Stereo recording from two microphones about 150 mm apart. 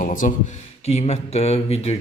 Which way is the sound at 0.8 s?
45° left (ahead or behind).